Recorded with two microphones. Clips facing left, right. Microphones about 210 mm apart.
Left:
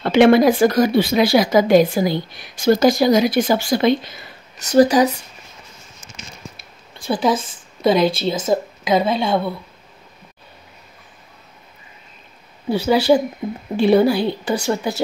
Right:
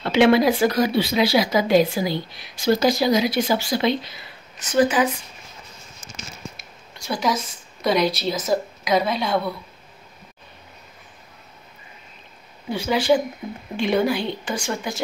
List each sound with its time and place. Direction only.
0.0 s speech: 50° left (ahead or behind)
4.6 s a woman's voice: 40° left (ahead or behind)
7.1 s a woman's voice: 30° left (ahead or behind)
12.7 s a woman's voice: 40° left (ahead or behind)